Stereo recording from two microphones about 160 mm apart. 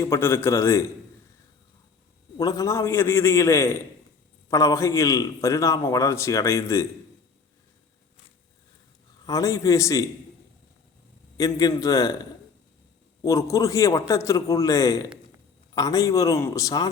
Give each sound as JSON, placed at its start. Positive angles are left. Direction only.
{"t": 0.0, "sound": "a man's voice", "side_deg": 15}
{"t": 2.4, "sound": "a man's voice", "side_deg": 20}
{"t": 9.2, "sound": "a man's voice", "side_deg": 20}
{"t": 11.3, "sound": "a man's voice", "side_deg": 20}
{"t": 13.2, "sound": "a man's voice", "side_deg": 20}